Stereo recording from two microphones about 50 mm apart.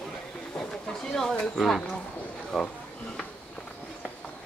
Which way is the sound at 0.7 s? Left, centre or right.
Centre.